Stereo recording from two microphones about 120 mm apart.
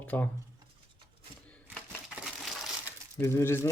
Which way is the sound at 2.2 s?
Centre (ahead or behind).